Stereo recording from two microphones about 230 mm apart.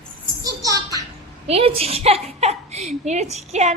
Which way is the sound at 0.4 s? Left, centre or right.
Centre.